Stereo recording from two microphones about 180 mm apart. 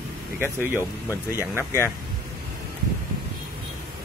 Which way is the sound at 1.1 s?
15° left (ahead or behind).